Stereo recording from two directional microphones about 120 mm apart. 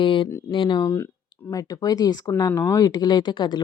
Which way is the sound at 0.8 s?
25° left (ahead or behind).